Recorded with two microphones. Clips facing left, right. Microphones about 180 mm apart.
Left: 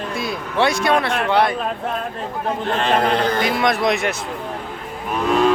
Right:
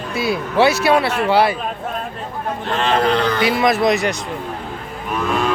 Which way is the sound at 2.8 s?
50° left (ahead or behind).